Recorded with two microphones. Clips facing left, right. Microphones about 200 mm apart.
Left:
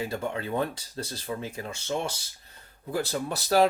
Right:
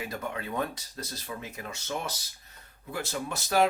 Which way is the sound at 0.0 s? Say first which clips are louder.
Left 4 dB; 30° left (ahead or behind).